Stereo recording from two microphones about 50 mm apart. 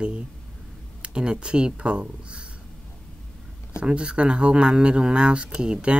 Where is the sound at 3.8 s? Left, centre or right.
Right.